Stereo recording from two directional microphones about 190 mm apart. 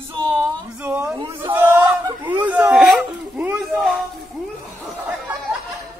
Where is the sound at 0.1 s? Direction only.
25° right (ahead or behind).